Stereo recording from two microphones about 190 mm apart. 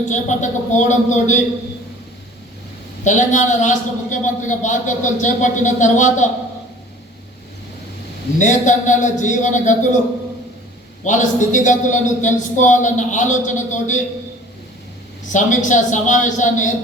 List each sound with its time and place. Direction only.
0.1 s a man's voice: 40° left (ahead or behind)
3.0 s a man's voice: 40° left (ahead or behind)
8.4 s a man's voice: 40° left (ahead or behind)
11.0 s a man's voice: 40° left (ahead or behind)
15.3 s a man's voice: 40° left (ahead or behind)